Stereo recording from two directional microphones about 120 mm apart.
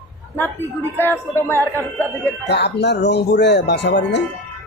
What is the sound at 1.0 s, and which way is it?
Speech, 20° left (ahead or behind).